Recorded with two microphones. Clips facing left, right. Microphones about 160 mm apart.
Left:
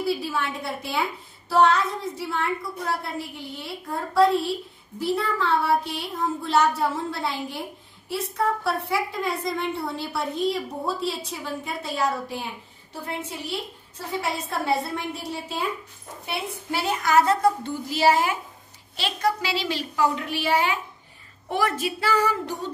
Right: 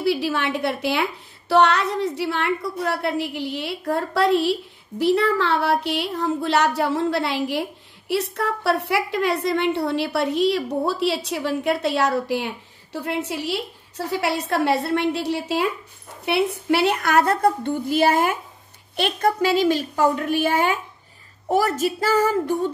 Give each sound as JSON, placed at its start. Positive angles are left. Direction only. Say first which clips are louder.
{"t": 0.0, "sound": "a woman's voice", "louder": "right 4 dB", "side_deg": -75}